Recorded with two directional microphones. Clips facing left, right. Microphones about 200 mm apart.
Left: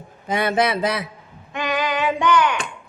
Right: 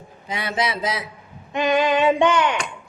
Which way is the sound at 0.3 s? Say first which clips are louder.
Left 5 dB; 55° left (ahead or behind).